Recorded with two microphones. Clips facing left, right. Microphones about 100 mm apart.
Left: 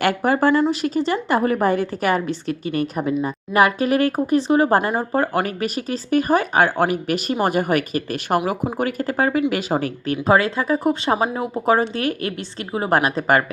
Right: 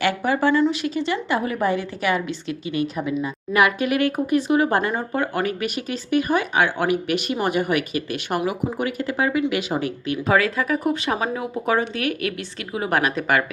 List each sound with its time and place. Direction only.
0.0 s speech: 45° left (ahead or behind)